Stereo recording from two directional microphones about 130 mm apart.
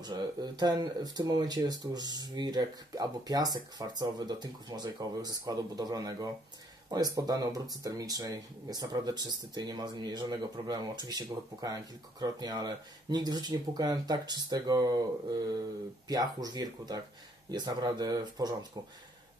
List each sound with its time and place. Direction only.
0.0 s speech: 30° right (ahead or behind)